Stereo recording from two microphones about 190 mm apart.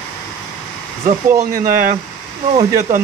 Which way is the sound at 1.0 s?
45° right (ahead or behind).